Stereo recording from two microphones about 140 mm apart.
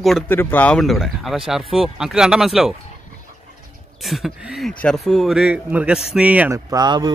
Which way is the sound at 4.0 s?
Centre (ahead or behind).